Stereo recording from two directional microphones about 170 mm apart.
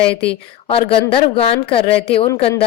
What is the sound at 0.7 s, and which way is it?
A woman's voice, 35° left (ahead or behind).